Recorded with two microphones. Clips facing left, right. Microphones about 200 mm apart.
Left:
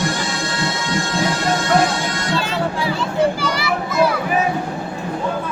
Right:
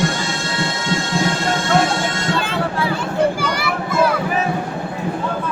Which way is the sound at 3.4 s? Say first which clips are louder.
Even; 50° right (ahead or behind).